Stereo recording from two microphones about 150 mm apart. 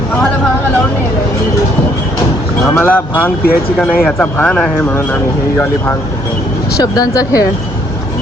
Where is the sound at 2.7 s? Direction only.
15° left (ahead or behind).